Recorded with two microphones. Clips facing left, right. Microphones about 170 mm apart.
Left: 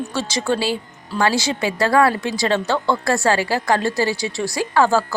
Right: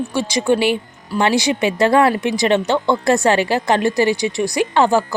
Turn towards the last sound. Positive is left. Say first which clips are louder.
# right 2 dB
turn(degrees=-20)  # may be behind; listen again after turning